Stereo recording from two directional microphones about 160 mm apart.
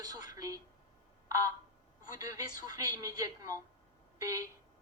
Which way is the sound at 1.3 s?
20° right (ahead or behind).